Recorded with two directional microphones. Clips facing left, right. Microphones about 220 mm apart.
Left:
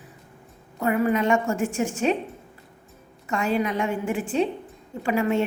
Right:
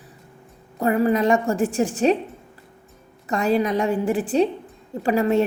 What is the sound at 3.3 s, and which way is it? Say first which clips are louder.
A woman's voice: right 4 dB; 35° right (ahead or behind).